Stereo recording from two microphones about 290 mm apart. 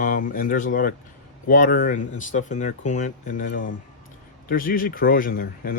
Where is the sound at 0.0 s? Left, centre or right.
Left.